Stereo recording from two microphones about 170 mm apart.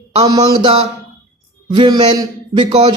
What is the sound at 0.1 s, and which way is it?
Speech, 25° right (ahead or behind).